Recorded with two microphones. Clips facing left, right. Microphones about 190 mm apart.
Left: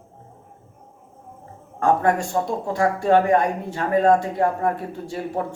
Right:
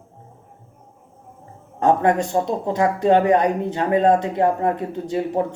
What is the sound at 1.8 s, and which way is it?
Speech, 20° right (ahead or behind).